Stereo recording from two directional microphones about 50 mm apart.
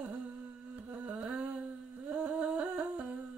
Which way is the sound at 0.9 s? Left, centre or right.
Right.